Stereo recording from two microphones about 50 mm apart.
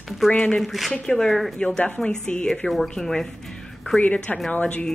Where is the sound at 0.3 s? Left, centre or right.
Left.